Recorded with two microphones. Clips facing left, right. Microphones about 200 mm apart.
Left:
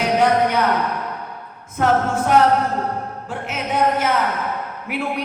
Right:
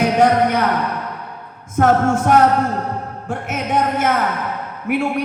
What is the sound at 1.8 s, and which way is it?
Speech, 50° right (ahead or behind).